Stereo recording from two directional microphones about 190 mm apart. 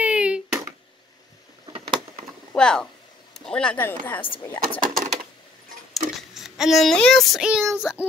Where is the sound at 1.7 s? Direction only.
25° right (ahead or behind).